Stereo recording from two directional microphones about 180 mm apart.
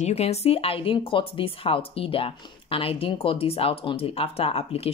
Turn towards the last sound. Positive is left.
turn(degrees=35)  # may be behind; listen again after turning